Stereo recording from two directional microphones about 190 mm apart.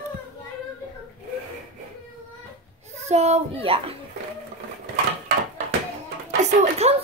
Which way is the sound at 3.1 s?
35° right (ahead or behind).